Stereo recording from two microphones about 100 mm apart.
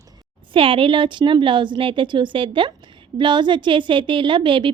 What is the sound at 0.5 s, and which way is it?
A woman's voice, 60° right (ahead or behind).